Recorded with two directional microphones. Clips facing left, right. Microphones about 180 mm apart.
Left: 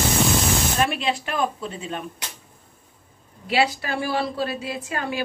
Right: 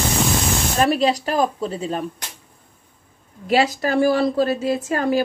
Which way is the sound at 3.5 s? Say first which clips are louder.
Right 5 dB; 40° right (ahead or behind).